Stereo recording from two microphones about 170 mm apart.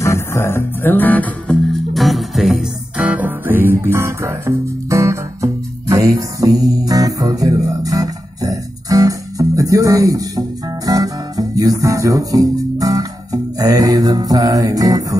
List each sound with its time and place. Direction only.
0.0 s music: 15° left (ahead or behind); by 15.1 s 20° right (ahead or behind)